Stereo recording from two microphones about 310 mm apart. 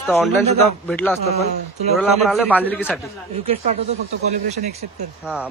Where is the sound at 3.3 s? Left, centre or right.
Centre.